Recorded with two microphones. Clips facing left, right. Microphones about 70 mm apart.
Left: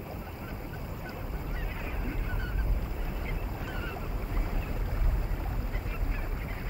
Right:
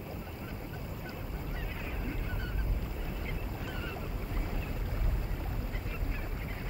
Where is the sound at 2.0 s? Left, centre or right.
Centre.